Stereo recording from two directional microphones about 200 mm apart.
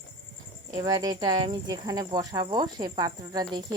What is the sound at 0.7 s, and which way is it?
Speech, 20° right (ahead or behind).